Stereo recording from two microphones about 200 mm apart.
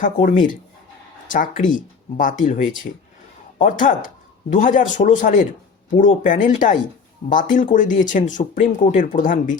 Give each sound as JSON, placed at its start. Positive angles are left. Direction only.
{"t": 0.0, "sound": "speech", "side_deg": 40}